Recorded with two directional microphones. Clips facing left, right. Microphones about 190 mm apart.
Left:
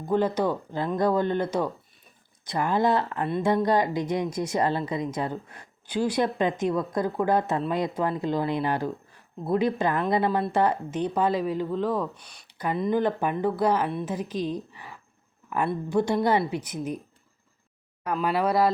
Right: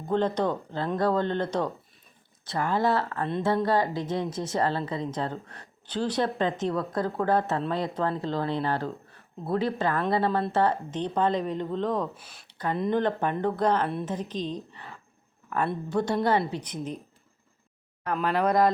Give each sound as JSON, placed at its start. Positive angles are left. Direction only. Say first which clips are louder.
{"t": 0.1, "sound": "a woman's voice", "louder": "left 1 dB", "side_deg": 10}
{"t": 12.5, "sound": "a sound", "louder": "left 1 dB", "side_deg": 10}
{"t": 12.7, "sound": "a woman's voice", "louder": "left 1 dB", "side_deg": 5}
{"t": 18.0, "sound": "speech", "louder": "even", "side_deg": 5}